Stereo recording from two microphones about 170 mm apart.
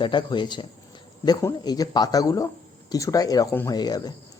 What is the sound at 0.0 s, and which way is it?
Speech, 25° left (ahead or behind).